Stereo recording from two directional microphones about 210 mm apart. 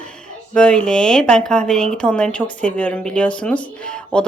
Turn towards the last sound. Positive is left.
turn(degrees=5)  # may be behind; listen again after turning